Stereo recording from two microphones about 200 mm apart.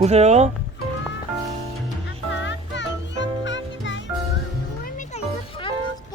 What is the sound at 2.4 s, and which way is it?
Music, 65° left (ahead or behind).